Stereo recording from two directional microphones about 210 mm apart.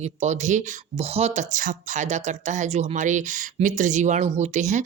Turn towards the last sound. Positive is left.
turn(degrees=-35)  # may be behind; listen again after turning